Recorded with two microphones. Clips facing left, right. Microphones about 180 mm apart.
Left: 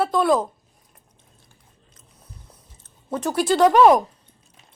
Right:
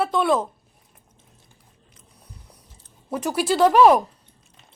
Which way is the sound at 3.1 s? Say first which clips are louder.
Left 2 dB; 10° right (ahead or behind).